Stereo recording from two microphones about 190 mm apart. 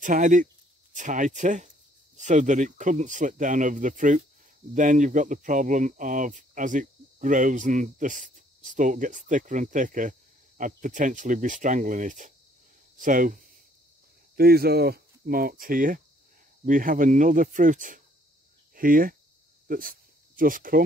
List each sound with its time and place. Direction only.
0.0 s speech: 40° right (ahead or behind)